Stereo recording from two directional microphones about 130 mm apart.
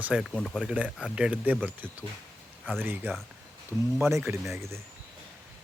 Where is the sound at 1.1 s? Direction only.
10° right (ahead or behind).